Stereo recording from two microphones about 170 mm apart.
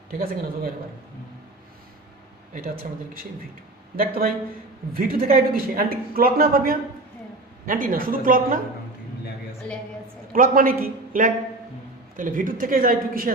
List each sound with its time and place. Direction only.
0.1 s speech: 60° right (ahead or behind)
2.5 s speech: 55° right (ahead or behind)
3.9 s speech: 60° right (ahead or behind)
10.3 s speech: 55° right (ahead or behind)